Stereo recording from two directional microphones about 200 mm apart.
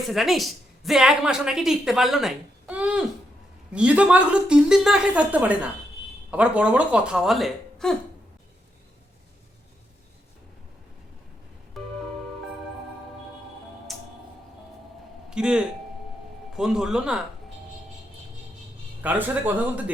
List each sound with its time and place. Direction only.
0.1 s a woman's voice: centre (ahead or behind)
11.8 s music: centre (ahead or behind)
13.9 s music: centre (ahead or behind)
15.3 s a man's voice: 5° right (ahead or behind)
19.0 s speech: 10° right (ahead or behind)